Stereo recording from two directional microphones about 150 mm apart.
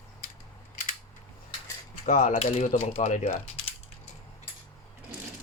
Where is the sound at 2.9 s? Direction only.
50° left (ahead or behind).